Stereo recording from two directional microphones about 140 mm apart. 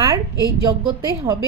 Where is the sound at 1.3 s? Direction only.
25° right (ahead or behind).